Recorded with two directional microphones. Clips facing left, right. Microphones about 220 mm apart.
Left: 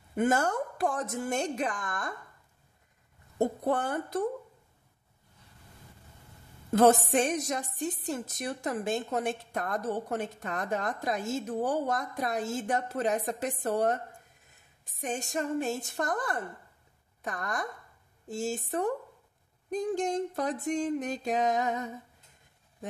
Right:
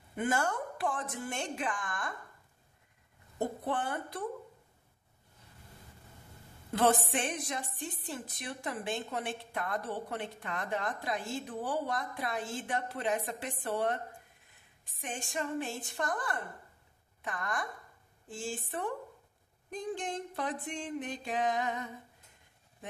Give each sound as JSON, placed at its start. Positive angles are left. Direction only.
{"t": 0.1, "sound": "a woman's voice", "side_deg": 45}
{"t": 3.3, "sound": "a woman's voice", "side_deg": 45}
{"t": 6.7, "sound": "a woman's voice", "side_deg": 45}